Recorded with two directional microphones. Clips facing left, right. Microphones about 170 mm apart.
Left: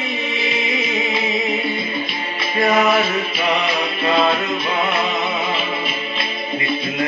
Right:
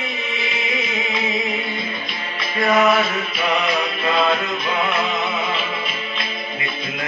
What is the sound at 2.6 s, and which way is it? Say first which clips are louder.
Music: even; 30° left (ahead or behind).